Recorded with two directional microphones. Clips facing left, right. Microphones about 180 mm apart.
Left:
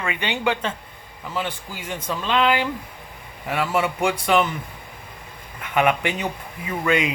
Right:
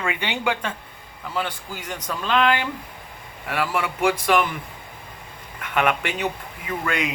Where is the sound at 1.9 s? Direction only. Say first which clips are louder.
Even; 10° left (ahead or behind).